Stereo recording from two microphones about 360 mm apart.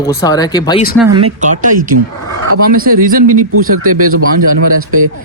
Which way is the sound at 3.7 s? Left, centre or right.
Right.